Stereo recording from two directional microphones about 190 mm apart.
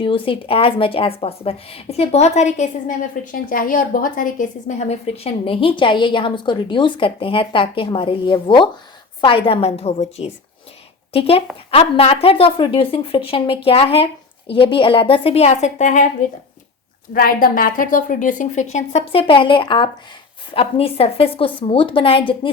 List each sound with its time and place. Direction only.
0.0 s a woman's voice: 25° left (ahead or behind)
17.2 s a woman's voice: 50° left (ahead or behind); by 22.4 s 30° left (ahead or behind)